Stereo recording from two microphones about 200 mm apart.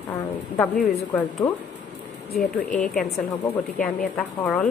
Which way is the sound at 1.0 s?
15° left (ahead or behind).